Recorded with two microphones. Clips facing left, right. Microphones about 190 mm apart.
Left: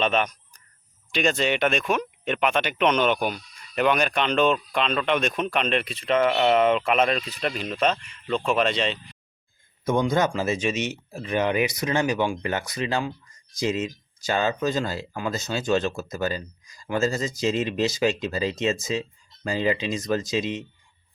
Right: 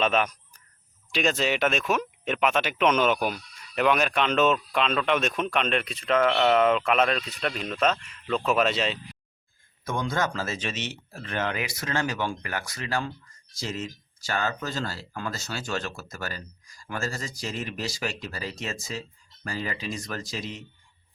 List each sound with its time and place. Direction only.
0.0 s speech: 5° right (ahead or behind)
9.8 s speech: 20° left (ahead or behind)